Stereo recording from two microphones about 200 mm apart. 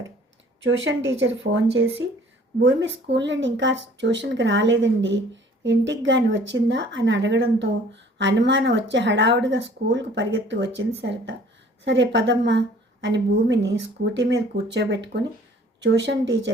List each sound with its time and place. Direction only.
0.6 s speech: 65° right (ahead or behind)